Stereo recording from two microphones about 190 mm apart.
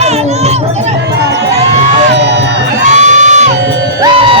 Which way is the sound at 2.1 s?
65° right (ahead or behind).